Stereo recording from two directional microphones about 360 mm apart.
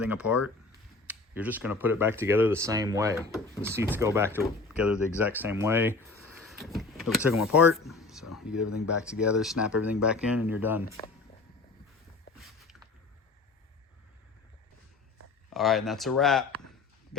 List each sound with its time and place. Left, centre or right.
0.0 s speech: centre
6.1 s vehicle: centre
7.5 s speech: centre
10.8 s speech: centre
15.5 s speech: centre